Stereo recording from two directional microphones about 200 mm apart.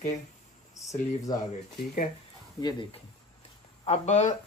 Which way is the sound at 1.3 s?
20° left (ahead or behind).